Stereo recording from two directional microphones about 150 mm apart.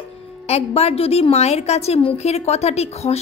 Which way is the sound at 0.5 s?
45° left (ahead or behind).